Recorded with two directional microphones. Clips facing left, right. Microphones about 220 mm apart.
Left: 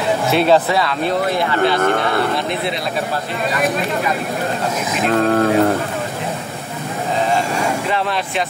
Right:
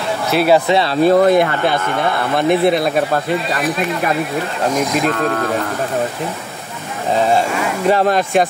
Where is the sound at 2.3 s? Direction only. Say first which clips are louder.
Right 8 dB; 55° right (ahead or behind).